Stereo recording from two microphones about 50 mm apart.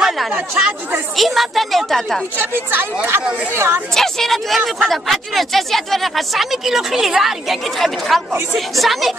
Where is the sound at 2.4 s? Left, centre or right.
Right.